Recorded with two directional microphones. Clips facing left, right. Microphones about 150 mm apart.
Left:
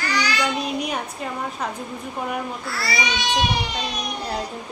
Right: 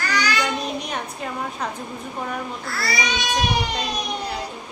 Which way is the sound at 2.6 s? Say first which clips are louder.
Right 2 dB; 45° right (ahead or behind).